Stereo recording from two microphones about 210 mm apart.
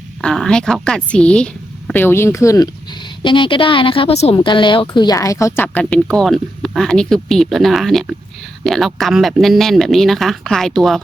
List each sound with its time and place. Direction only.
0.2 s a woman's voice: 5° left (ahead or behind)